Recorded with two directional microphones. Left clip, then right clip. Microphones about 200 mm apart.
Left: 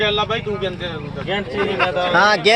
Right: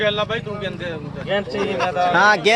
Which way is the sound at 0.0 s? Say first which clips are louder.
Left 2 dB; 45° left (ahead or behind).